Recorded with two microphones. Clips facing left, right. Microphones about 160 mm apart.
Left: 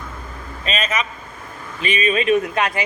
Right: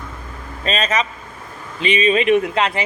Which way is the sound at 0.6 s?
35° right (ahead or behind).